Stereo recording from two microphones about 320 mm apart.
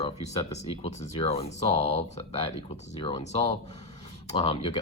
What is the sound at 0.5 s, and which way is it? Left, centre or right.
Speech, centre.